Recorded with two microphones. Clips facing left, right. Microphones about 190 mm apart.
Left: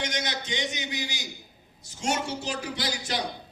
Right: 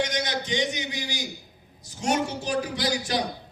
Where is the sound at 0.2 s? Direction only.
20° left (ahead or behind).